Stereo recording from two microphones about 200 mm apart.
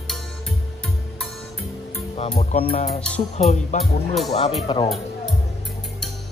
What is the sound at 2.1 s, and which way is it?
Music, 30° left (ahead or behind).